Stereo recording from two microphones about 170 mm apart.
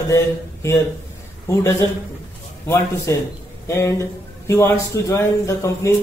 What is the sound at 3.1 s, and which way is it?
Speech, 15° left (ahead or behind).